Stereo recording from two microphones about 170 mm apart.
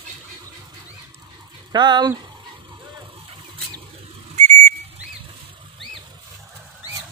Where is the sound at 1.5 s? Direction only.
25° right (ahead or behind).